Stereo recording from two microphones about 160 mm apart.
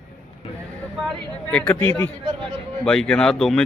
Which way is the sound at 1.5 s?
5° left (ahead or behind).